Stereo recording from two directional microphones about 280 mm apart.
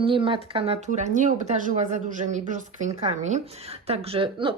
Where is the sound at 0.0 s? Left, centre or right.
Centre.